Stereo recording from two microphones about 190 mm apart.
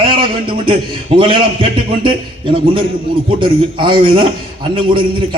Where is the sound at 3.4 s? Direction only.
25° right (ahead or behind).